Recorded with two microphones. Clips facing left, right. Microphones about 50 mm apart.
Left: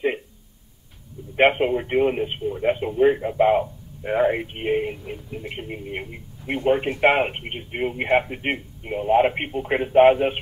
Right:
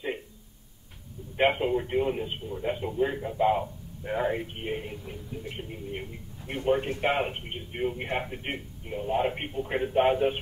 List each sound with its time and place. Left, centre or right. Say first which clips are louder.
1.6 s speech: left 6 dB; left